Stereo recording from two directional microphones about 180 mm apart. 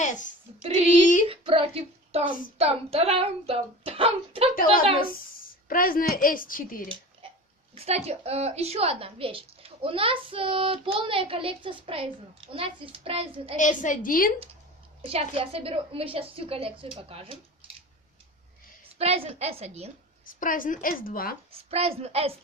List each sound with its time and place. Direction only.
0.0 s child singing: 45° left (ahead or behind)
0.8 s speech: 45° left (ahead or behind)
1.3 s a woman's voice: 30° right (ahead or behind)
5.6 s a woman's voice: 50° left (ahead or behind)
7.2 s a sound: 30° right (ahead or behind)
7.8 s a woman's voice: 35° right (ahead or behind)
13.6 s a woman's voice: 45° left (ahead or behind)
15.0 s a woman's voice: 35° right (ahead or behind)
18.9 s a woman's voice: 35° right (ahead or behind)
20.4 s a woman's voice: 50° left (ahead or behind)
21.7 s a woman's voice: 35° right (ahead or behind)